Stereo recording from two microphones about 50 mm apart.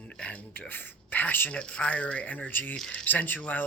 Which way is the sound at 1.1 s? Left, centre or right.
Left.